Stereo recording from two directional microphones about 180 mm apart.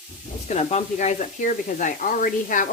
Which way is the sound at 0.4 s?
40° left (ahead or behind).